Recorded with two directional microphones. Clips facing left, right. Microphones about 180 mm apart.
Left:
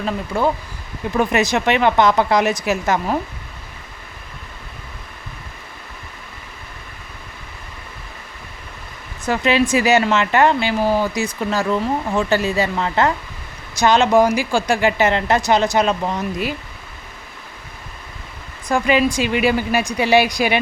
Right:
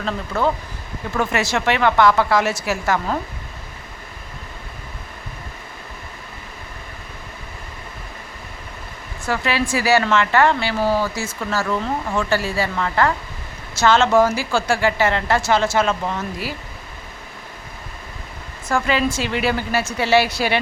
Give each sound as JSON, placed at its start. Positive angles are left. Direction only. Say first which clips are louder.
{"t": 0.0, "sound": "speech", "louder": "left 2 dB", "side_deg": 15}
{"t": 9.2, "sound": "speech", "louder": "left 5 dB", "side_deg": 20}
{"t": 18.7, "sound": "speech", "louder": "left 3 dB", "side_deg": 15}